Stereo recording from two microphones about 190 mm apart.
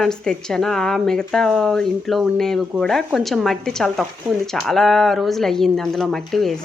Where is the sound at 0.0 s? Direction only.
5° left (ahead or behind).